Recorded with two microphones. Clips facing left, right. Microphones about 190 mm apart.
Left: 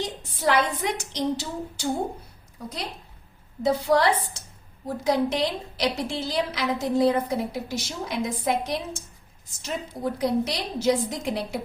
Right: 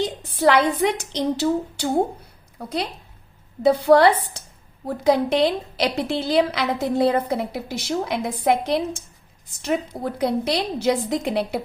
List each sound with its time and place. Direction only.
0.0 s a woman's voice: 65° right (ahead or behind)